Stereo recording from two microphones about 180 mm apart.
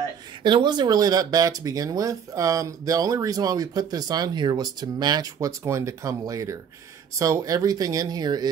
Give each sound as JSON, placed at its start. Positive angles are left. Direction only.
{"t": 0.4, "sound": "speech", "side_deg": -25}